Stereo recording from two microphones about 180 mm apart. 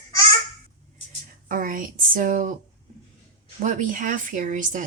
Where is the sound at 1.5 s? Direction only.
50° right (ahead or behind).